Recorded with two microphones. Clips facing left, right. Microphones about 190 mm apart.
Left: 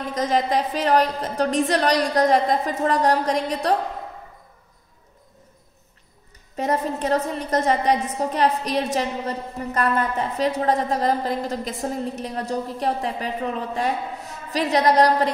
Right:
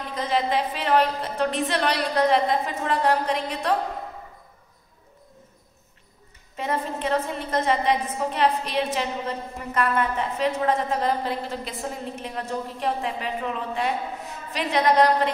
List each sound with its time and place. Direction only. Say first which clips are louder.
0.1 s a woman's voice: left 3 dB; 45° left (ahead or behind)
6.5 s a woman's voice: left 4 dB; 40° left (ahead or behind)